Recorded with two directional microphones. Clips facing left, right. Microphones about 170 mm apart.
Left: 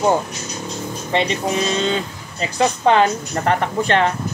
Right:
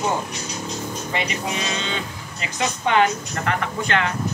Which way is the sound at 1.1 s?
30° left (ahead or behind).